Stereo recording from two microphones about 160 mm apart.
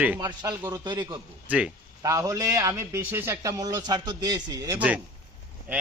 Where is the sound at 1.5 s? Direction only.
5° right (ahead or behind).